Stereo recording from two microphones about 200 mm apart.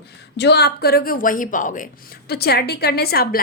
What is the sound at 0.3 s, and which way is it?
A woman's voice, 55° left (ahead or behind).